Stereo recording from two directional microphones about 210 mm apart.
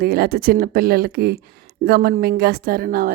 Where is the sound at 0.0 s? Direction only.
50° right (ahead or behind).